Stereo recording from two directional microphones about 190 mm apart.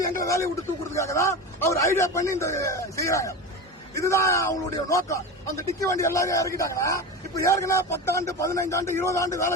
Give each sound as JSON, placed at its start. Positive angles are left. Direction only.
{"t": 0.0, "sound": "speech", "side_deg": 15}